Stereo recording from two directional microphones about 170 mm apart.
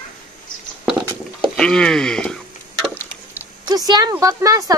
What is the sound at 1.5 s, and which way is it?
Speech, 5° left (ahead or behind).